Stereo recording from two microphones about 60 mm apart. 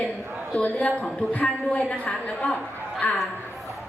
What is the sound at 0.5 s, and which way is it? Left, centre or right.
A woman's voice, left.